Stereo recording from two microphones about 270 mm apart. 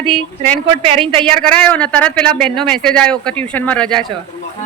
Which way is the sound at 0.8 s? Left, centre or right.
Centre.